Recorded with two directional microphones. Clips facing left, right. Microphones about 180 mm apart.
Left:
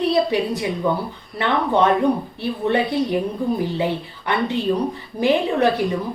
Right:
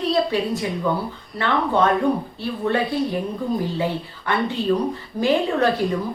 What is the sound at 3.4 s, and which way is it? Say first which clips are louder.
A woman's voice: left 2 dB; 15° left (ahead or behind).